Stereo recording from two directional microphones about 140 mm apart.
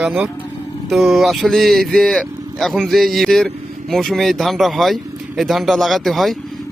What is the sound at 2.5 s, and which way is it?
Speech, centre (ahead or behind).